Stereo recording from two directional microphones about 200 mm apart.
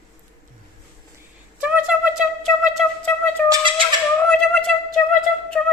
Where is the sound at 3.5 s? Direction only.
25° right (ahead or behind).